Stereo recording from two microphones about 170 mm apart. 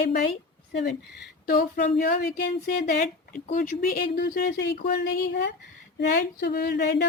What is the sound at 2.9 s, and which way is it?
Speech, 45° left (ahead or behind).